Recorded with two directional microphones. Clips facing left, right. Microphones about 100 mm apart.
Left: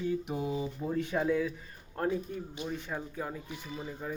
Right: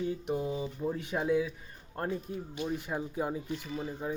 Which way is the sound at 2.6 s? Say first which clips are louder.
Right 4 dB; 10° right (ahead or behind).